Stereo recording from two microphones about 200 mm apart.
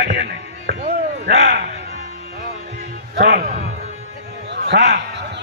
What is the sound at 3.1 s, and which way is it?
Speech, 50° right (ahead or behind).